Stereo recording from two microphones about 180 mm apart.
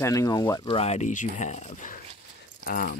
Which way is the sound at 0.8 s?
40° left (ahead or behind).